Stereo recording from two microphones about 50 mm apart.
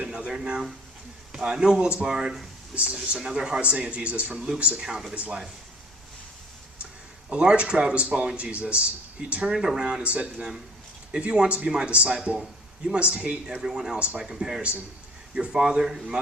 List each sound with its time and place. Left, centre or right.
0.0 s a sound: right
0.3 s a man's voice: centre
2.7 s speech: centre
5.1 s speech: right
7.3 s speech: right
9.5 s speech: centre
9.8 s speech: right
13.5 s speech: centre
15.6 s speech: centre